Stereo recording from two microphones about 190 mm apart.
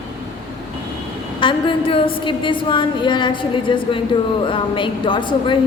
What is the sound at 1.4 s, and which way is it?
A woman's voice, 25° left (ahead or behind).